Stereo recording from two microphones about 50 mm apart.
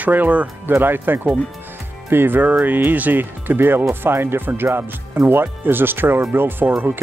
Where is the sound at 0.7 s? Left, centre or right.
Right.